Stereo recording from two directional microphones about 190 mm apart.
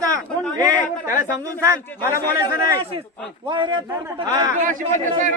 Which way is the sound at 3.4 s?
25° right (ahead or behind).